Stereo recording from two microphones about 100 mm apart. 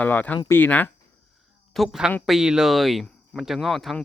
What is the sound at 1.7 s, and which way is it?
Speech, centre (ahead or behind).